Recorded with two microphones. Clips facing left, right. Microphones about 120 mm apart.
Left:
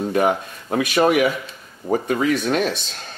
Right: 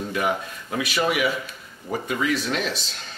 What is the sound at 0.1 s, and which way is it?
Speech, 45° left (ahead or behind).